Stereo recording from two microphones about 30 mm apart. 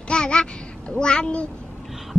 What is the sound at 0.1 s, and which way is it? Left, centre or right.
A child's voice, left.